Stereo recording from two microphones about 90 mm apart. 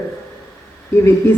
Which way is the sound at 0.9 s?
30° left (ahead or behind).